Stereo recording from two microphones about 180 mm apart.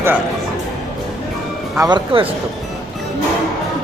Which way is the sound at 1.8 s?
25° right (ahead or behind).